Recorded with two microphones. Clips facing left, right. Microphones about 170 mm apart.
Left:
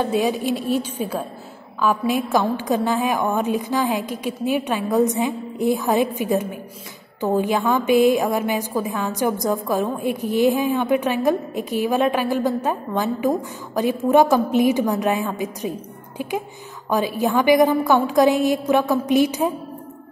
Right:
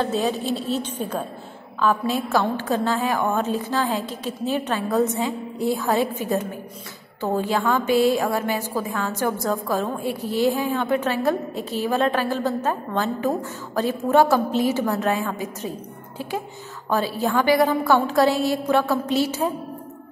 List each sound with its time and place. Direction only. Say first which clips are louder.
0.0 s a woman's voice: left 3 dB; 15° left (ahead or behind)